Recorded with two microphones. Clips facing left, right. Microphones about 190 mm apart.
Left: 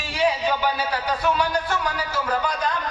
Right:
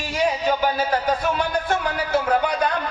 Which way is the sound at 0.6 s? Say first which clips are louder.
Right 4 dB; 45° right (ahead or behind).